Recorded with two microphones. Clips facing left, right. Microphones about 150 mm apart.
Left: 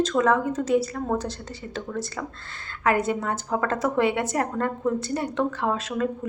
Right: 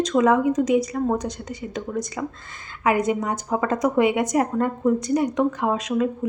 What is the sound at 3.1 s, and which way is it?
A woman's voice, 15° right (ahead or behind).